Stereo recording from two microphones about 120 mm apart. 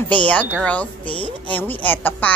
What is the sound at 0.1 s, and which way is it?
A child's voice, 10° left (ahead or behind).